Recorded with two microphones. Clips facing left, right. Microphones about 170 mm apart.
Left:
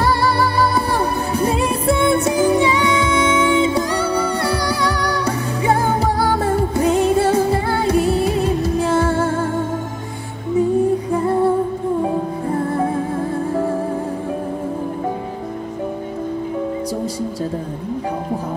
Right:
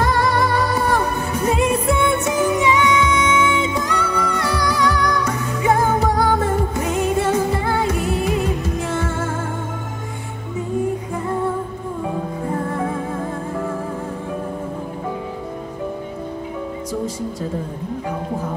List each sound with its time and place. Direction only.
0.0 s music: 35° left (ahead or behind)
11.1 s music: 35° left (ahead or behind)
12.7 s music: 35° left (ahead or behind)